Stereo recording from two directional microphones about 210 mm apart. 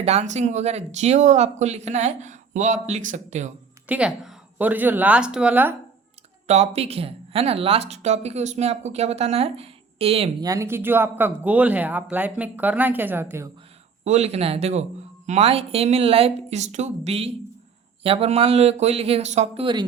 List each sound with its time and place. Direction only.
0.0 s speech: 30° right (ahead or behind)
3.8 s speech: 5° right (ahead or behind)
6.5 s speech: 30° right (ahead or behind)
10.4 s speech: 15° right (ahead or behind)
14.0 s speech: 30° right (ahead or behind)